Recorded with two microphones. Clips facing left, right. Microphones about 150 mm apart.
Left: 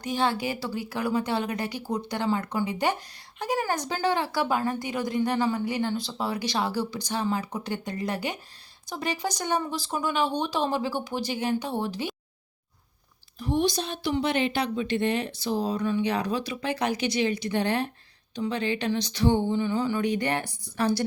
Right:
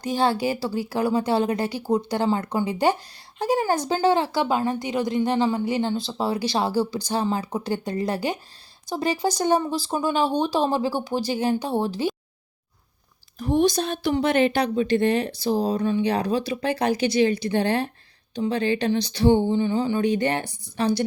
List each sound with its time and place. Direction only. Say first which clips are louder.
0.0 s a woman's voice: right 4 dB; 35° right (ahead or behind)
13.4 s a woman's voice: right 5 dB; 45° right (ahead or behind); by 21.0 s 20° right (ahead or behind)